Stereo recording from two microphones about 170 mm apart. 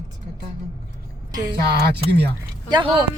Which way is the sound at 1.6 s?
70° right (ahead or behind).